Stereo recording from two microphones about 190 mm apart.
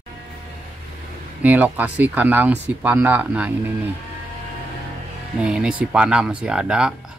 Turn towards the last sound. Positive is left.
turn(degrees=-5)  # may be behind; listen again after turning